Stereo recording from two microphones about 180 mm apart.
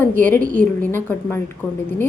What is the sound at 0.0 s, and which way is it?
Speech, 10° left (ahead or behind).